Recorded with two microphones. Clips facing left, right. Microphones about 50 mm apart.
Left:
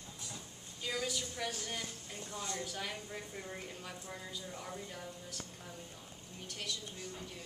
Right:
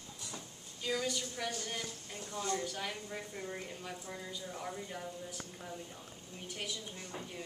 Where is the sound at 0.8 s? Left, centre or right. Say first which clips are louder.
Right 2 dB; centre.